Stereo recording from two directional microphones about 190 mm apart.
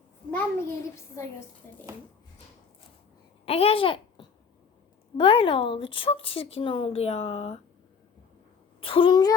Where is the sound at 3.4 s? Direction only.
30° left (ahead or behind).